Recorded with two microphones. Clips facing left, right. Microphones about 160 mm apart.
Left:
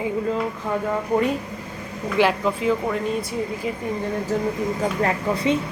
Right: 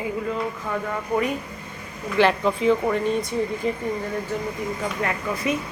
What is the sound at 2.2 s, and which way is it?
Speech, 5° left (ahead or behind).